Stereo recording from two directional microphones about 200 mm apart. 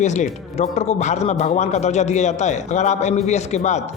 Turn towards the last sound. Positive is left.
turn(degrees=35)  # may be behind; listen again after turning